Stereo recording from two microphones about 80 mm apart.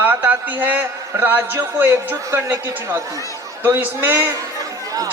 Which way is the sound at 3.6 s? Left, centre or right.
Right.